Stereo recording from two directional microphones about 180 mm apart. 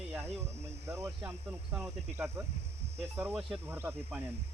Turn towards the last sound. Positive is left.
turn(degrees=-15)  # may be behind; listen again after turning